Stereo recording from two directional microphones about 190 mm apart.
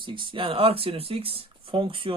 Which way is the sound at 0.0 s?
25° right (ahead or behind).